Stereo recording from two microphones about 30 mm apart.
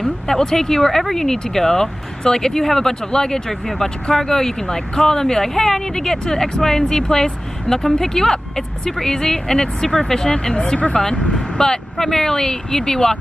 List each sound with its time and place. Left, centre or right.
0.0 s speech: centre
3.4 s speech: centre